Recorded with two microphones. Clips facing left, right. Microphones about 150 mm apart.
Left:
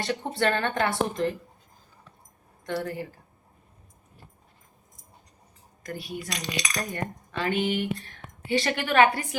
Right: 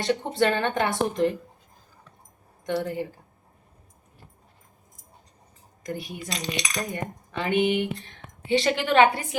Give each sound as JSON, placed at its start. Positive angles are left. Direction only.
{"t": 0.0, "sound": "speech", "side_deg": -20}
{"t": 2.6, "sound": "cutlery", "side_deg": -20}
{"t": 5.8, "sound": "cutlery", "side_deg": -20}